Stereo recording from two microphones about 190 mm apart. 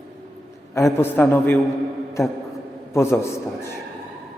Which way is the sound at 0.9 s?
10° left (ahead or behind).